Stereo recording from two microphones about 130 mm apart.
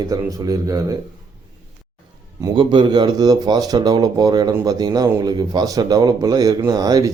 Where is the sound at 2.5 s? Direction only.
40° right (ahead or behind).